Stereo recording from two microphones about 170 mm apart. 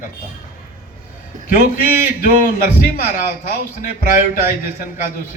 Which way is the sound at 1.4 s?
50° left (ahead or behind).